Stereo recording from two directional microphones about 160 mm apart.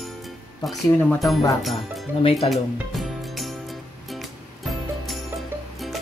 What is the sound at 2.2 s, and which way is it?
Speech, 35° left (ahead or behind).